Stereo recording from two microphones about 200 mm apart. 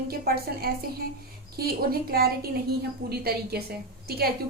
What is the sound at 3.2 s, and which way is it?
A woman's voice, 50° right (ahead or behind).